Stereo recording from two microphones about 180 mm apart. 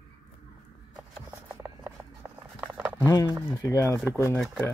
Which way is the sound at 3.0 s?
20° left (ahead or behind).